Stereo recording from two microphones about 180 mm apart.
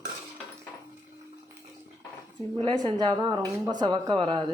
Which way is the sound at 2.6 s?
25° right (ahead or behind).